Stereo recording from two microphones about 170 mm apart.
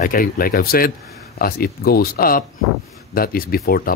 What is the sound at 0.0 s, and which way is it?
Speech, 55° left (ahead or behind).